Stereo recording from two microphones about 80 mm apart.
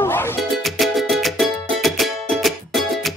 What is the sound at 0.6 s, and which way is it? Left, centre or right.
Music, centre.